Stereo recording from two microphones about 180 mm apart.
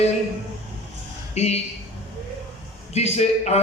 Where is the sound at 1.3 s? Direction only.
35° left (ahead or behind).